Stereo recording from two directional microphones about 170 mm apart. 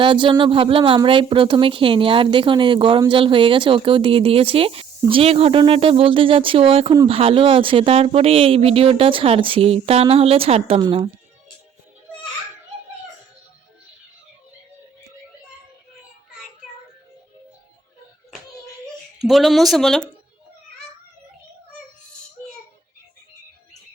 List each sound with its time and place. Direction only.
0.0 s speech: 30° right (ahead or behind)
19.2 s speech: centre (ahead or behind)